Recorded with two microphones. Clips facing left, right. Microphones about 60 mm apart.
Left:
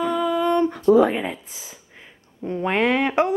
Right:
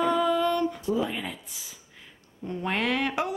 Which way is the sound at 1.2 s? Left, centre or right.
Left.